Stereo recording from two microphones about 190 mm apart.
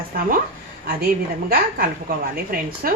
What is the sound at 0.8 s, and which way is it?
A woman's voice, 55° right (ahead or behind).